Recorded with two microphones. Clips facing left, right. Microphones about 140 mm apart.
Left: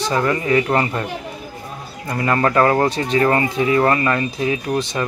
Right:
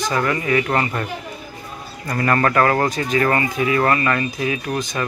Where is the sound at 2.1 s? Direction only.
15° left (ahead or behind).